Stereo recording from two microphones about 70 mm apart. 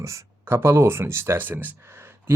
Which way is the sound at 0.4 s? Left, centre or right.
Right.